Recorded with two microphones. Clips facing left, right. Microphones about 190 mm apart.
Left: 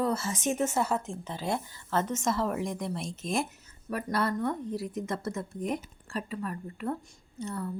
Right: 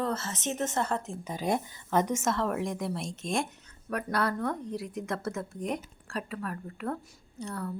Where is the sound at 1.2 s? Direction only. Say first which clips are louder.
Right 5 dB; 15° right (ahead or behind).